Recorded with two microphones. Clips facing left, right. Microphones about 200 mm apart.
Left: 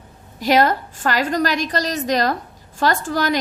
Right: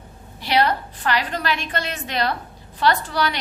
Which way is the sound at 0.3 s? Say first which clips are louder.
Left 4 dB; 45° left (ahead or behind).